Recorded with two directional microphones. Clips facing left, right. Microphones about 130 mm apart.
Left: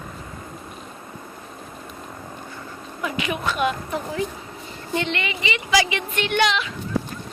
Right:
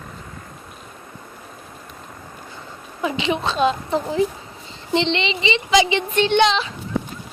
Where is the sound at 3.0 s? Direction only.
25° right (ahead or behind).